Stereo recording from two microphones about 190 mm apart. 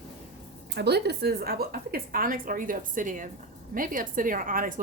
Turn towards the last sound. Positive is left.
turn(degrees=-45)  # may be behind; listen again after turning